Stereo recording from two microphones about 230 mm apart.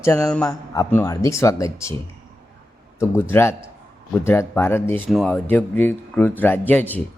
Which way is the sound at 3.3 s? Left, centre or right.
Centre.